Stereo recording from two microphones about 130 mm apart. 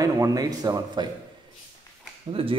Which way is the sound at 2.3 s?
45° right (ahead or behind).